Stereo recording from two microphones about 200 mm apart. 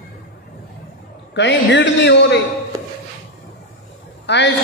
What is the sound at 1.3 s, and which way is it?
A man's voice, 65° left (ahead or behind).